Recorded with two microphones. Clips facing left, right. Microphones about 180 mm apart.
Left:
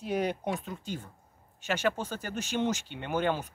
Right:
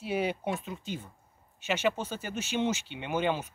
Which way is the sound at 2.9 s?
15° right (ahead or behind).